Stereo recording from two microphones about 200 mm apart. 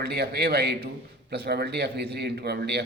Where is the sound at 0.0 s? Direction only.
50° right (ahead or behind).